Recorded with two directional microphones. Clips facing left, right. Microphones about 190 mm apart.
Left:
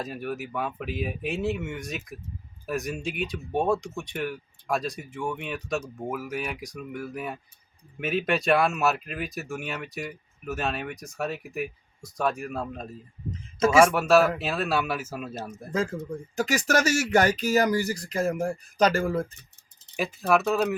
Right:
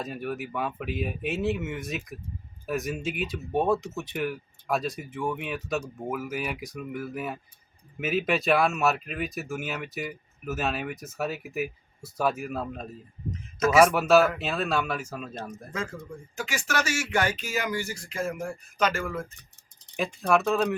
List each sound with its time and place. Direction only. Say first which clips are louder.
0.0 s speech: even; centre (ahead or behind)
15.7 s speech: left 8 dB; 35° left (ahead or behind)
20.0 s speech: left 1 dB; 5° left (ahead or behind)